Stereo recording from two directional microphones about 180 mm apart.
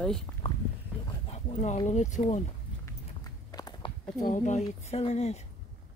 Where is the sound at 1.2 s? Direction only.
40° left (ahead or behind).